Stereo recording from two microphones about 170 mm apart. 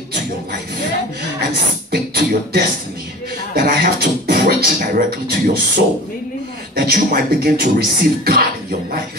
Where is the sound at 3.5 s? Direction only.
65° right (ahead or behind).